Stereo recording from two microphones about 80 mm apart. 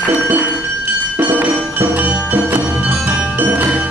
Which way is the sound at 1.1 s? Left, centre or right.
Right.